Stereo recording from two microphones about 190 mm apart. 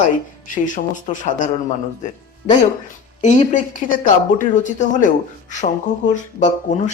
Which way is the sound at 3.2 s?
40° left (ahead or behind).